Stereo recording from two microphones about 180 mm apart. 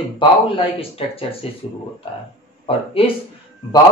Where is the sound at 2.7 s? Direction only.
30° left (ahead or behind).